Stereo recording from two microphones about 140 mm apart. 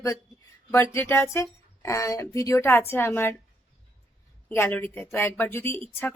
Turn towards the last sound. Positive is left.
turn(degrees=15)  # may be behind; listen again after turning